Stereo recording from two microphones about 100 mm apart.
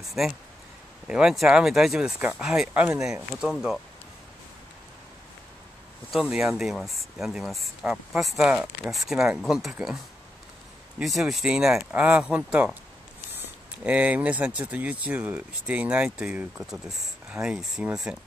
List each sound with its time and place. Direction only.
0.2 s speech: 5° right (ahead or behind)
2.7 s speech: 20° right (ahead or behind)
3.0 s speech: 5° right (ahead or behind)
6.1 s speech: 5° right (ahead or behind)
11.0 s speech: 5° right (ahead or behind)